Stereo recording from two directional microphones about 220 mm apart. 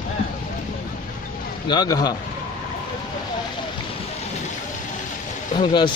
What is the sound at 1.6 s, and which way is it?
Speech, 20° left (ahead or behind).